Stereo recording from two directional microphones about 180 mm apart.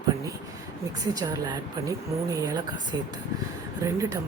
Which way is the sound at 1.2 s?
20° right (ahead or behind).